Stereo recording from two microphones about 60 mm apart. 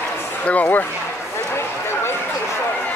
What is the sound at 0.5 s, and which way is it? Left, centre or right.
Speech, left.